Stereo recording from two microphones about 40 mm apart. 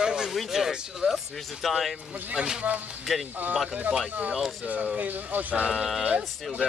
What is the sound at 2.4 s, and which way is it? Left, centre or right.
Speech, centre.